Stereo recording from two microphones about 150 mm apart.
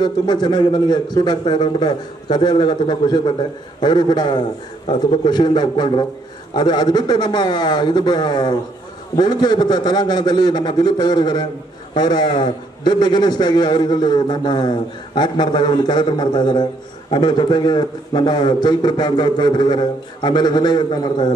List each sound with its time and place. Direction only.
0.0 s a man's voice: 30° left (ahead or behind)